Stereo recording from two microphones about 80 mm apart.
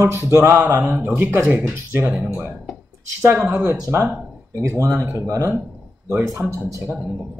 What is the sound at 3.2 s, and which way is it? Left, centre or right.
Speech, right.